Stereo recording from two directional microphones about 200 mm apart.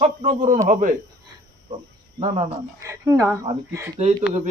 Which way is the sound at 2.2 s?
30° right (ahead or behind).